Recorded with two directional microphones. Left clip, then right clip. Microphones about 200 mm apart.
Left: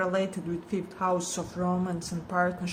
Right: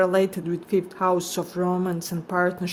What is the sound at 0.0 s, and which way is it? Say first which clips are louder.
Speech: right 8 dB; 55° right (ahead or behind).